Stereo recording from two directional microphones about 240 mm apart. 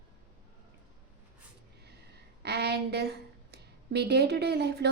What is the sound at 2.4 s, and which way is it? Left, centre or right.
A woman's voice, right.